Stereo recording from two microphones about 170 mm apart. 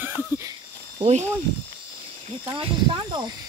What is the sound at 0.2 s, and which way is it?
Snake, 20° right (ahead or behind).